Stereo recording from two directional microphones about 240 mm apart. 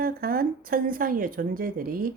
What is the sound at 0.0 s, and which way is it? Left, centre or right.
Speech, right.